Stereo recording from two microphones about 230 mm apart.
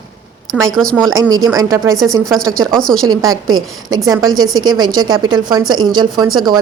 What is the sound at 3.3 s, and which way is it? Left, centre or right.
Speech, right.